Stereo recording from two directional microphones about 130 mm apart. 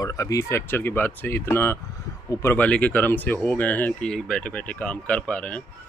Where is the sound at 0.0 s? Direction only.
25° left (ahead or behind).